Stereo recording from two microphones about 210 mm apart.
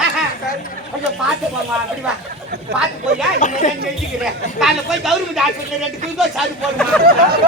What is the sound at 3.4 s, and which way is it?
Speech, 35° left (ahead or behind).